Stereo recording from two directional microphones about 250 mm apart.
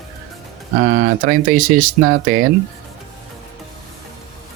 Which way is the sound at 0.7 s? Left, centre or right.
Right.